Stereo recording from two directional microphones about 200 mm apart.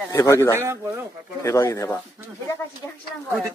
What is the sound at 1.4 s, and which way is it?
Speech, 15° left (ahead or behind).